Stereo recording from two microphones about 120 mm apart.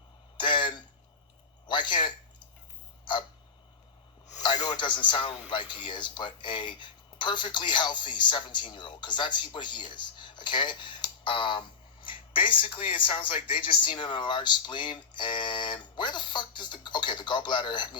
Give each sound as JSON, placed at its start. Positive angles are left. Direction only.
{"t": 0.3, "sound": "a sound", "side_deg": 40}
{"t": 3.0, "sound": "hiccup", "side_deg": 40}
{"t": 4.6, "sound": "a man's voice", "side_deg": 40}